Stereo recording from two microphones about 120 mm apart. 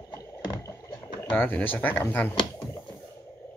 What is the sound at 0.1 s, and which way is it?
Rowboat, 20° left (ahead or behind).